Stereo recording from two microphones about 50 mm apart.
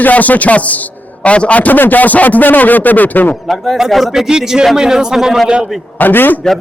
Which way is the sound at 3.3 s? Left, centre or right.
Centre.